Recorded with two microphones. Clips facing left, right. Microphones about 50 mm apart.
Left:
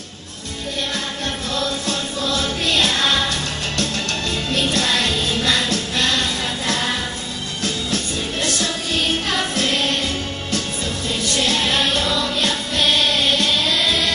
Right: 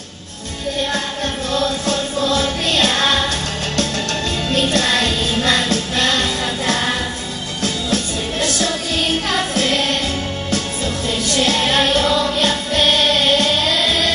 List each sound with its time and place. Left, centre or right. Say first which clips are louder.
1.5 s music: right 5 dB; right
4.5 s music: right 3 dB; right
11.2 s music: right 3 dB; right